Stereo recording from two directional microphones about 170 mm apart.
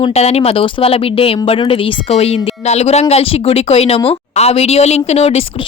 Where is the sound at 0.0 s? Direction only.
40° left (ahead or behind).